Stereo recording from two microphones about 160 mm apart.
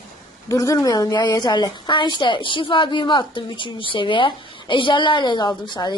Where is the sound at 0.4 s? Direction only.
20° left (ahead or behind).